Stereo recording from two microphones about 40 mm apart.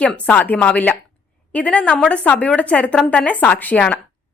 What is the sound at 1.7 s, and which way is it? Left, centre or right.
A woman's voice, left.